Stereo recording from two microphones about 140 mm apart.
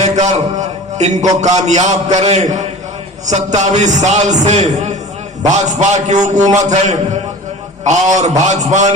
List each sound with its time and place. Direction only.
0.0 s a man's voice: 55° right (ahead or behind)